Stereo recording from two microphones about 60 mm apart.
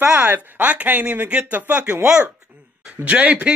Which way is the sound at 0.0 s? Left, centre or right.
Right.